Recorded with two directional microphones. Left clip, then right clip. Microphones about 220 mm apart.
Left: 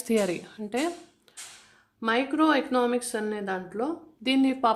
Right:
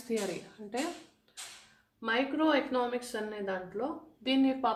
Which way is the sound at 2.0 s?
50° left (ahead or behind).